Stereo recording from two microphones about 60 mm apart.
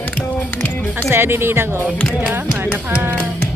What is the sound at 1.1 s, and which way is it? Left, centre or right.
Speech, right.